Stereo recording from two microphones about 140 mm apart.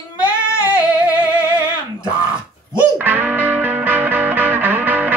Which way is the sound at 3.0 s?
15° right (ahead or behind).